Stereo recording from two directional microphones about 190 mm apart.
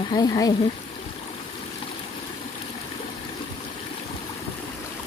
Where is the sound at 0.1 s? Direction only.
20° left (ahead or behind).